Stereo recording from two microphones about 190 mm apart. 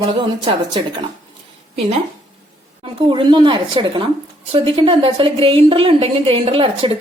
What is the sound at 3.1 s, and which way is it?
A woman's voice, 25° right (ahead or behind).